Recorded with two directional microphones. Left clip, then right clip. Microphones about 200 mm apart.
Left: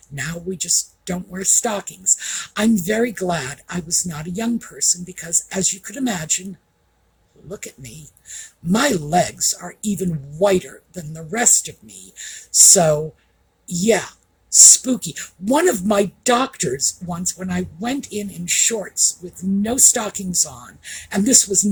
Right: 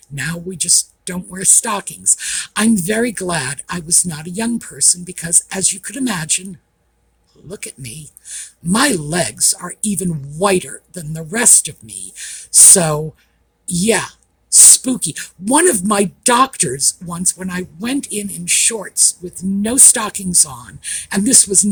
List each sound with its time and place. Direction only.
0.1 s speech: 35° right (ahead or behind)
7.4 s speech: 40° right (ahead or behind)